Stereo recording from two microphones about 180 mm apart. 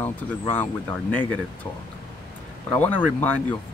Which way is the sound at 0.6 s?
10° left (ahead or behind).